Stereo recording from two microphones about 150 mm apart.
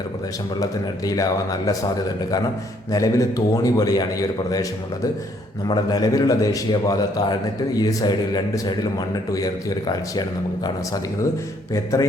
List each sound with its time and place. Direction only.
0.6 s a man's voice: 25° left (ahead or behind)
2.9 s a man's voice: 20° left (ahead or behind)
5.6 s a man's voice: 25° left (ahead or behind)
11.7 s a man's voice: 20° left (ahead or behind)